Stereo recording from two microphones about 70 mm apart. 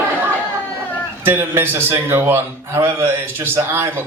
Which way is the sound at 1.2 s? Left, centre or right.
Right.